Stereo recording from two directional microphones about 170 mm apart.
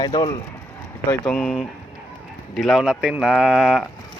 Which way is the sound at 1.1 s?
5° left (ahead or behind).